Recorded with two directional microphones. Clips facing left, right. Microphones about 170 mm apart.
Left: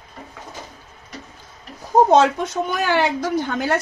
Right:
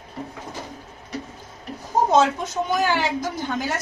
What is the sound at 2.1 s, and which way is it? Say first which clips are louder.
A woman's voice: left 3 dB; 60° left (ahead or behind).